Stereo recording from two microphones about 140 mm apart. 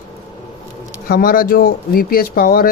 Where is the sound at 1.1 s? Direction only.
90° left.